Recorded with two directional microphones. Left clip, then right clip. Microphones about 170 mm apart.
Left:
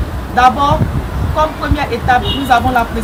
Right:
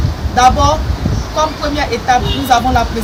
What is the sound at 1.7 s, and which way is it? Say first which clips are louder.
Speech: even; 20° right (ahead or behind).